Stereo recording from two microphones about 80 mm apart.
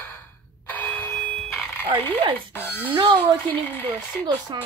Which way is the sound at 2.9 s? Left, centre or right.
Right.